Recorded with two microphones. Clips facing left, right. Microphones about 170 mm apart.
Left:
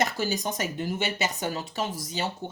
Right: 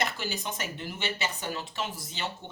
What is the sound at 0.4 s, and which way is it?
Speech, 40° left (ahead or behind).